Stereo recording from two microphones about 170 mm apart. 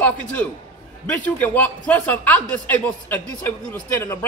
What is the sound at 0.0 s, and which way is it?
Speech, 10° left (ahead or behind).